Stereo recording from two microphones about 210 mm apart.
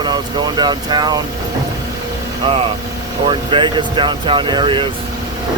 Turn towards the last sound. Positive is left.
turn(degrees=-25)  # may be behind; listen again after turning